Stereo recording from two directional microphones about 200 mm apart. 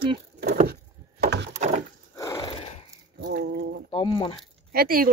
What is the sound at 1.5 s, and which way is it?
Wood, 35° right (ahead or behind).